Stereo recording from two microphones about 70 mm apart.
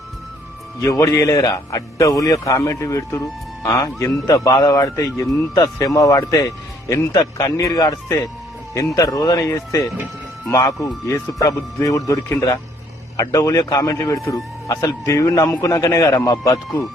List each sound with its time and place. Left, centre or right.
0.8 s speech: left
4.3 s speech: left
5.5 s speech: left
9.0 s speech: left
9.5 s speech: left